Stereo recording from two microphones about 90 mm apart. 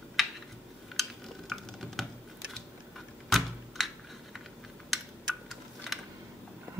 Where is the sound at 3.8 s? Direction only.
Centre (ahead or behind).